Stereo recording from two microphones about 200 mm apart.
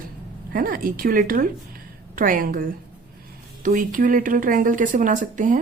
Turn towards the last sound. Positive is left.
turn(degrees=-40)  # may be behind; listen again after turning